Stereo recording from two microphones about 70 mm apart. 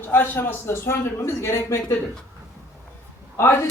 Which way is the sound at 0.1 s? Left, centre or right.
Left.